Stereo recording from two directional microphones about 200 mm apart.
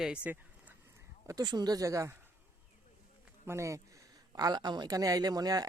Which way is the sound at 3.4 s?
15° right (ahead or behind).